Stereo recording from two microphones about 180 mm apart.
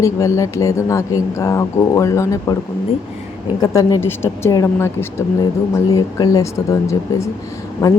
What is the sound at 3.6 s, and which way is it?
A woman's voice, 20° left (ahead or behind).